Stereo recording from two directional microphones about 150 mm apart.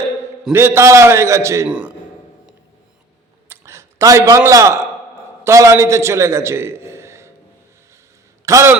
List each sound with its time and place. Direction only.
0.5 s a man's voice: 15° right (ahead or behind)
1.6 s a man's voice: 10° right (ahead or behind)
3.5 s a sound: 20° right (ahead or behind)
5.4 s a man's voice: 20° right (ahead or behind)
8.4 s a man's voice: 20° right (ahead or behind)